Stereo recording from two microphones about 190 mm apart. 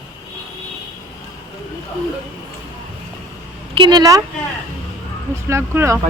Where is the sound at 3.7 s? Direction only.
25° right (ahead or behind).